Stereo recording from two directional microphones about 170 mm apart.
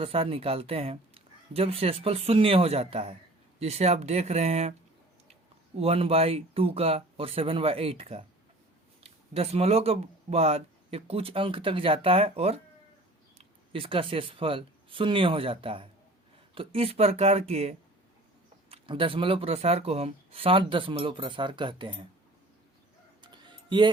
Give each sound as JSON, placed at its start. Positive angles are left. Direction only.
{"t": 0.0, "sound": "speech", "side_deg": -35}
{"t": 23.2, "sound": "music", "side_deg": -25}